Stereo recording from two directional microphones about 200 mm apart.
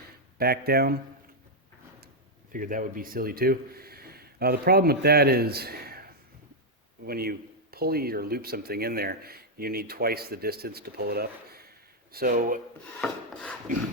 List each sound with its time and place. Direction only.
0.3 s speech: 50° right (ahead or behind)
2.5 s speech: 45° right (ahead or behind)
7.0 s speech: 50° right (ahead or behind)
13.0 s filing: 5° left (ahead or behind)